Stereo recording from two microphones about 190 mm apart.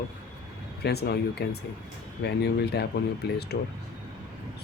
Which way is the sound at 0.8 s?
60° left (ahead or behind).